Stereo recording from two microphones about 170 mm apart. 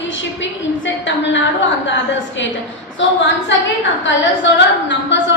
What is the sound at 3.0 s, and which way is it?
A woman's voice, 90° left.